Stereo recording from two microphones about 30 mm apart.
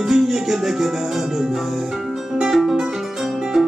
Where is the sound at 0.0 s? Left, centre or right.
Centre.